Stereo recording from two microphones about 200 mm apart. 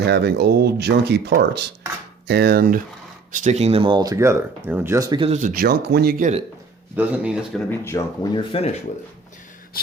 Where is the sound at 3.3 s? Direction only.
35° right (ahead or behind).